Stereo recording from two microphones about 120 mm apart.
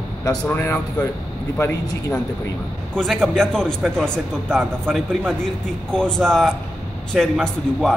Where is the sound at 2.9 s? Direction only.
Centre (ahead or behind).